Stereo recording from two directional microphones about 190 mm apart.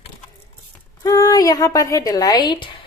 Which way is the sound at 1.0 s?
20° left (ahead or behind).